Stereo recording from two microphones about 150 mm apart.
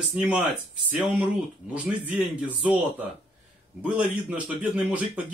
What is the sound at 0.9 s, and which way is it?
A man's voice, 5° right (ahead or behind).